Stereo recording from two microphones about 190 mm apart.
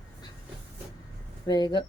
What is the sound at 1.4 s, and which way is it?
Speech, 20° left (ahead or behind).